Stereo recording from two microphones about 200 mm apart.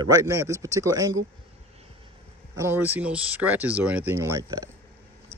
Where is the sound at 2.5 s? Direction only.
10° right (ahead or behind).